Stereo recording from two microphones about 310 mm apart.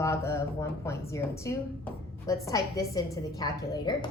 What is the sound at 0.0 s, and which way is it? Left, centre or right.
A woman's voice, centre.